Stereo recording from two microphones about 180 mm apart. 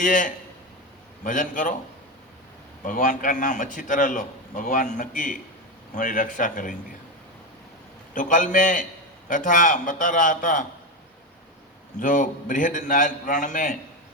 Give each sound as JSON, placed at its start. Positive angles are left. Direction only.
{"t": 0.0, "sound": "a man's voice", "side_deg": 45}
{"t": 2.8, "sound": "a man's voice", "side_deg": 45}
{"t": 8.1, "sound": "a man's voice", "side_deg": 45}
{"t": 11.9, "sound": "a man's voice", "side_deg": 45}